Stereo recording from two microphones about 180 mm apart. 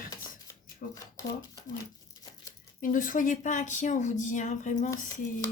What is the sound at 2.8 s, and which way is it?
Speech, 50° left (ahead or behind).